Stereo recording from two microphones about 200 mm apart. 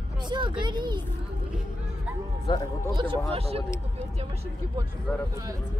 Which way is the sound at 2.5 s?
20° left (ahead or behind).